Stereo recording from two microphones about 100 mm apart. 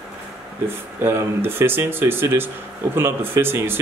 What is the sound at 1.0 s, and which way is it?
Speech, 20° right (ahead or behind).